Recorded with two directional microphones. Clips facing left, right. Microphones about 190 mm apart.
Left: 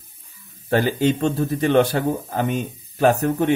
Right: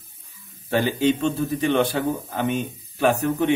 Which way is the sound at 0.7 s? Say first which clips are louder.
Left 1 dB; 45° left (ahead or behind).